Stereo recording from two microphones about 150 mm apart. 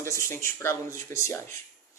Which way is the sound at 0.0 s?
20° left (ahead or behind).